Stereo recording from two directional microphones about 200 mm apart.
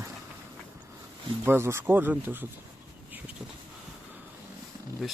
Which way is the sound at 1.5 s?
10° right (ahead or behind).